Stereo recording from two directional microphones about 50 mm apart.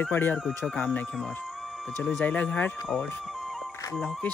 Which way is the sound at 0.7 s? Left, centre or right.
Left.